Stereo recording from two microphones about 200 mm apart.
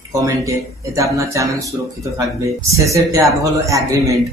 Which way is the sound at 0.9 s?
15° right (ahead or behind).